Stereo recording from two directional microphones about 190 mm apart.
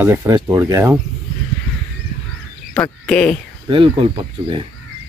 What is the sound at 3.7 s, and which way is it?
Speech, 25° right (ahead or behind).